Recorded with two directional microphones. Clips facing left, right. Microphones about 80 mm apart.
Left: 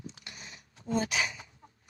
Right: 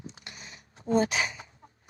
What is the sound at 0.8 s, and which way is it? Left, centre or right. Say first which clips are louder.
Speech: right 5 dB; right.